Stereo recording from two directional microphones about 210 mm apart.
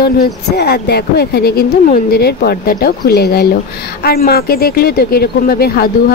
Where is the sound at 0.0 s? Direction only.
50° left (ahead or behind).